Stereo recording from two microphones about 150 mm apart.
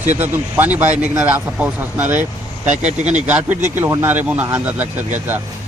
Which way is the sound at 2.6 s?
50° right (ahead or behind).